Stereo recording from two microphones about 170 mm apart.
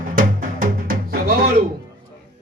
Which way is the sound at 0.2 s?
55° right (ahead or behind).